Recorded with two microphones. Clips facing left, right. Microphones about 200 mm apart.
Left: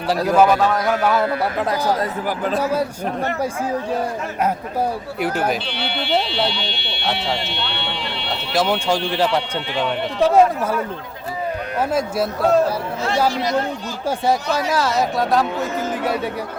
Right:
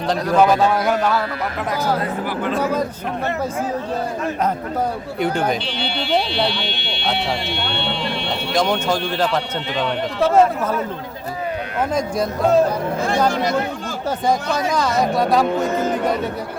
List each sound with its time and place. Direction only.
0.1 s speech: 5° left (ahead or behind)
0.6 s a man's voice: 10° right (ahead or behind)
1.0 s speech: 20° left (ahead or behind)
2.0 s speech: 40° left (ahead or behind)
5.2 s speech: 5° left (ahead or behind)
8.5 s a man's voice: 5° left (ahead or behind)
11.9 s speech: 5° left (ahead or behind)
13.3 s speech: 50° right (ahead or behind)
14.7 s speech: 5° left (ahead or behind)